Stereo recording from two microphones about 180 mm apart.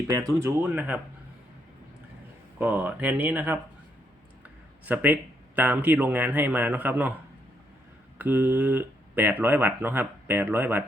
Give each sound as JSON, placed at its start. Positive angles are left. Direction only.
{"t": 0.1, "sound": "speech", "side_deg": -20}
{"t": 2.6, "sound": "speech", "side_deg": -10}
{"t": 8.2, "sound": "speech", "side_deg": -10}